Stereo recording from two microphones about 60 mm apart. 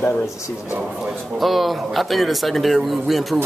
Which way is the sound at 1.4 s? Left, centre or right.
Centre.